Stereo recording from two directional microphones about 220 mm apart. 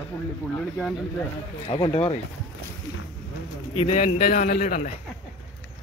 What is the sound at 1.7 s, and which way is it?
Speech, 25° left (ahead or behind).